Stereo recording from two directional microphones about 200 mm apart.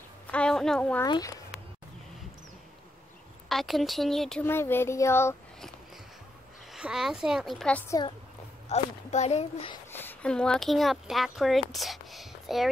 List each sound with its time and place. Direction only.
0.3 s a woman's voice: 5° left (ahead or behind)
1.0 s speech: 20° left (ahead or behind)
3.4 s speech: centre (ahead or behind)
6.7 s speech: centre (ahead or behind)
8.6 s speech: 35° left (ahead or behind)
9.8 s speech: 10° left (ahead or behind)